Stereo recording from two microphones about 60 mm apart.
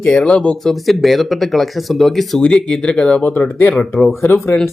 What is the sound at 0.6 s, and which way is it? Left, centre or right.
Speech, centre.